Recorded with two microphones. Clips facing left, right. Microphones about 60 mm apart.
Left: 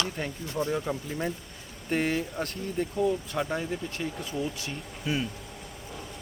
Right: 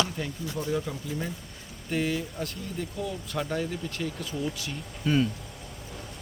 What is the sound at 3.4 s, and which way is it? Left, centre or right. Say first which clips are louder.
Speech: even; centre.